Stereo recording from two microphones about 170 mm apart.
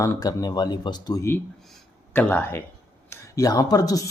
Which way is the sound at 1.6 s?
Centre (ahead or behind).